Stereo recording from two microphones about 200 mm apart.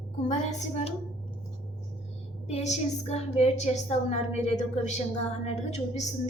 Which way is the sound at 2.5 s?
35° left (ahead or behind).